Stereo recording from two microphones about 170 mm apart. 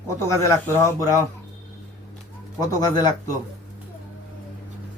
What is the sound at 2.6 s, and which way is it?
Speech, 20° left (ahead or behind).